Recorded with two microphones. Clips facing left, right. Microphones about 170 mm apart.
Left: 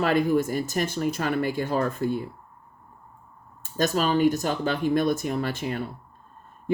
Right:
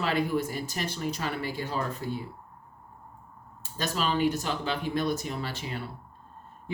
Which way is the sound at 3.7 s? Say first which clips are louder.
Left 6 dB; 45° left (ahead or behind).